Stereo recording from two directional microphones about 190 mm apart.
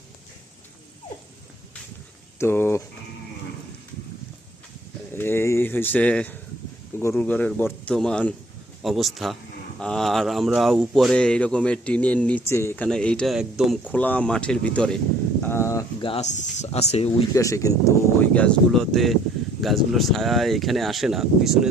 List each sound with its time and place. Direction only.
2.4 s speech: 10° left (ahead or behind)
5.1 s speech: 10° left (ahead or behind); by 13.9 s 5° right (ahead or behind)
13.9 s speech: 10° left (ahead or behind)
15.4 s a sound: 10° left (ahead or behind)
16.0 s speech: 30° left (ahead or behind)
17.3 s speech: 15° left (ahead or behind); by 21.7 s centre (ahead or behind)